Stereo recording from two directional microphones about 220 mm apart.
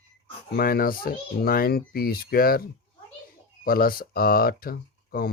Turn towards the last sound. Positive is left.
turn(degrees=40)  # may be behind; listen again after turning